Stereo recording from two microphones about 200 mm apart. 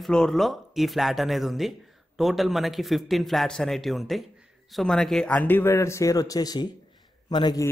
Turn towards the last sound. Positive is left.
turn(degrees=20)  # may be behind; listen again after turning